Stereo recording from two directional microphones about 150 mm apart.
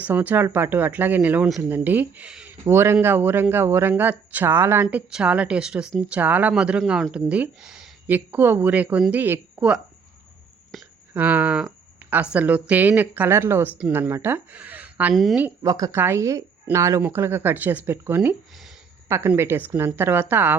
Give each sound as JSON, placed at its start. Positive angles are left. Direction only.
{"t": 0.0, "sound": "speech", "side_deg": -10}
{"t": 10.7, "sound": "whispering", "side_deg": 0}
{"t": 11.1, "sound": "speech", "side_deg": -10}
{"t": 15.6, "sound": "speech", "side_deg": -25}